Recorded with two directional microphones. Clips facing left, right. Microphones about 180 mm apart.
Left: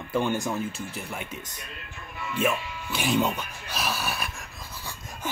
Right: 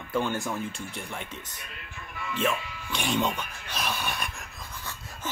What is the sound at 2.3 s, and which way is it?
Speech, 10° left (ahead or behind).